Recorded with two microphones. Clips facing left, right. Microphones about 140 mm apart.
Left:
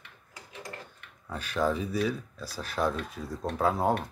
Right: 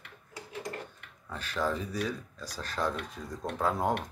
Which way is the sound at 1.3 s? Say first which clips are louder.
Left 4 dB; 10° left (ahead or behind).